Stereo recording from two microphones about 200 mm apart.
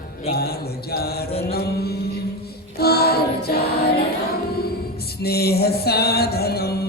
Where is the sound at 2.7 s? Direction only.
50° left (ahead or behind).